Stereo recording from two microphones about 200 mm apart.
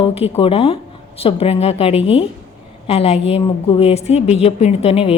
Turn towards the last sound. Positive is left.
turn(degrees=30)  # may be behind; listen again after turning